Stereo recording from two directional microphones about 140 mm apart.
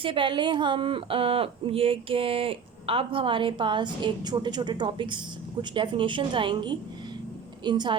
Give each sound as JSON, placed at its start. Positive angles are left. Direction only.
{"t": 0.0, "sound": "speech", "side_deg": -35}